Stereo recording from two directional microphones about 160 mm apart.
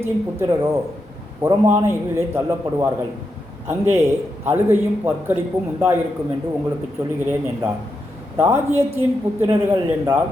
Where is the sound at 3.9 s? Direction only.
15° right (ahead or behind).